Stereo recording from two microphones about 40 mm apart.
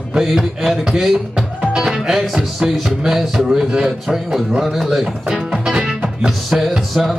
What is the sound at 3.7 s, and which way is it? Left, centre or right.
Speech, right.